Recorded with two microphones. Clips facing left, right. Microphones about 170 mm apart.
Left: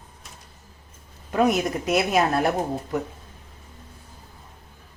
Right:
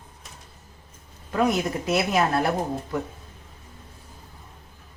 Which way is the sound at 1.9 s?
20° left (ahead or behind).